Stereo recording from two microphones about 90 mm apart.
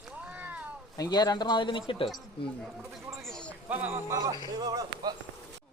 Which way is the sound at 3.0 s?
5° left (ahead or behind).